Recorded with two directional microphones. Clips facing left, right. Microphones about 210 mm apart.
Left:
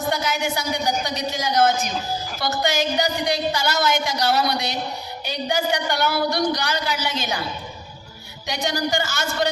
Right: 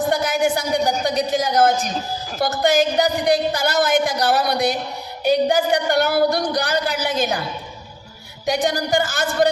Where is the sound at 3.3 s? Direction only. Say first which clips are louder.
Right 4 dB; 55° right (ahead or behind).